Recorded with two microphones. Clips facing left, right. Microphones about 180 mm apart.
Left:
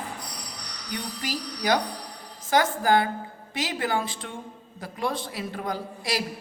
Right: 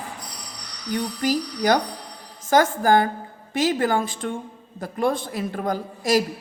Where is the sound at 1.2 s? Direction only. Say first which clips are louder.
Right 9 dB; 45° right (ahead or behind).